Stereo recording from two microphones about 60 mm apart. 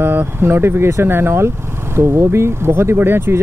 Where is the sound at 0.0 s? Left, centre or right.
Right.